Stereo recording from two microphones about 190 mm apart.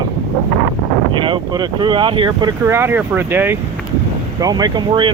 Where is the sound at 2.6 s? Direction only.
10° right (ahead or behind).